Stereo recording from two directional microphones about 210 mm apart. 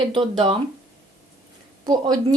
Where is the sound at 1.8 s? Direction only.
20° right (ahead or behind).